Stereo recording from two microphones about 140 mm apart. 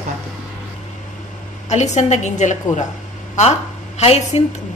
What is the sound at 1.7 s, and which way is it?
A woman's voice, 55° left (ahead or behind).